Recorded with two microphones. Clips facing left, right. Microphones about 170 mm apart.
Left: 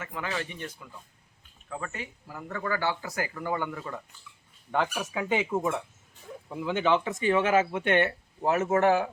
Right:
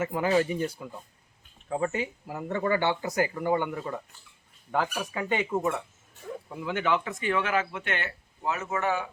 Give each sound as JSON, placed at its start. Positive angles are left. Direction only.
{"t": 0.0, "sound": "speech", "side_deg": -35}
{"t": 4.7, "sound": "speech", "side_deg": 0}
{"t": 6.5, "sound": "speech", "side_deg": 15}
{"t": 7.1, "sound": "speech", "side_deg": 35}
{"t": 7.3, "sound": "speech", "side_deg": 25}
{"t": 8.4, "sound": "speech", "side_deg": 45}